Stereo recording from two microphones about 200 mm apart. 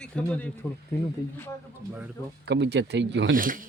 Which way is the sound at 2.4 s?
60° right (ahead or behind).